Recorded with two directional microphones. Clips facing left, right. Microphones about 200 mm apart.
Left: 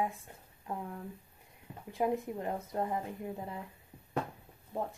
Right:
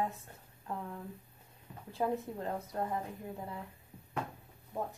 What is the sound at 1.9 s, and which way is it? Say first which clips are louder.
Speech: left 2 dB; 15° left (ahead or behind).